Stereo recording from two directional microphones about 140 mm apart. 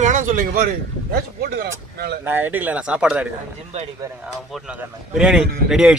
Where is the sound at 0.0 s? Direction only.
65° right (ahead or behind); by 2.2 s 90° right.